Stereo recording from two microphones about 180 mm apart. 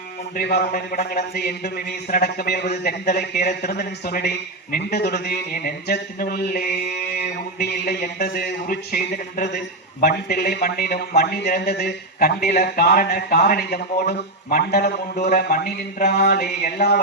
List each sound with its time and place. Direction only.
0.3 s a man's voice: 55° left (ahead or behind)